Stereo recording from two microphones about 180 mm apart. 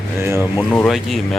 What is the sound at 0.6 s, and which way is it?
Speech, 5° left (ahead or behind).